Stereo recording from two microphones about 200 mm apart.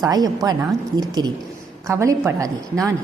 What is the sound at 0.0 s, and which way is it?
A woman's voice, 20° right (ahead or behind).